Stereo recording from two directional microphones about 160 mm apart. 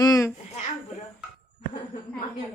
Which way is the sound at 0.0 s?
20° left (ahead or behind).